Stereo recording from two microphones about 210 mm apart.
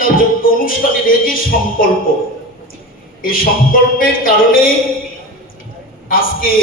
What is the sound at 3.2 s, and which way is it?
A man's voice, 40° left (ahead or behind).